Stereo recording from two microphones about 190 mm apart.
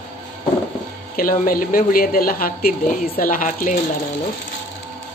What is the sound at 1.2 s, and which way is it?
A woman's voice, 45° left (ahead or behind).